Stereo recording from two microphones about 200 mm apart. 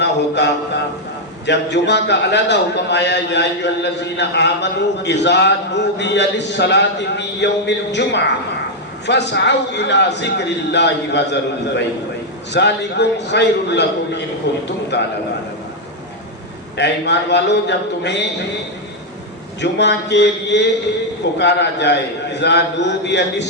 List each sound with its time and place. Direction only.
0.0 s a sound: 60° left (ahead or behind)
1.5 s a man's voice: 60° left (ahead or behind)
9.0 s a man's voice: 60° left (ahead or behind)
16.7 s a man's voice: 60° left (ahead or behind)
19.6 s a man's voice: 60° left (ahead or behind)